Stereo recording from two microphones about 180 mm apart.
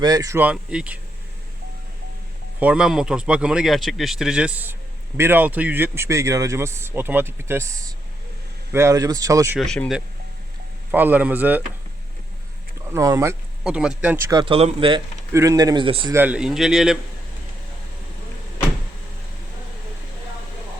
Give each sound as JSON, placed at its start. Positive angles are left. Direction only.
{"t": 0.0, "sound": "speech", "side_deg": -20}
{"t": 2.6, "sound": "speech", "side_deg": -5}
{"t": 9.6, "sound": "speech", "side_deg": 5}
{"t": 10.9, "sound": "speech", "side_deg": -10}
{"t": 12.9, "sound": "speech", "side_deg": -15}
{"t": 13.7, "sound": "speech", "side_deg": -5}
{"t": 14.3, "sound": "speech", "side_deg": -25}
{"t": 15.3, "sound": "speech", "side_deg": -15}
{"t": 16.1, "sound": "speech", "side_deg": -10}